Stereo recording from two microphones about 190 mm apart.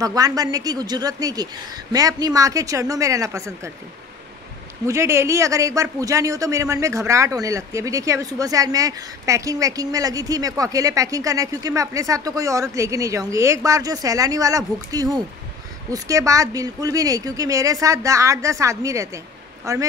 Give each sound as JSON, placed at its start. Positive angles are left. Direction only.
{"t": 0.0, "sound": "speech", "side_deg": -20}
{"t": 4.8, "sound": "a man's voice", "side_deg": -15}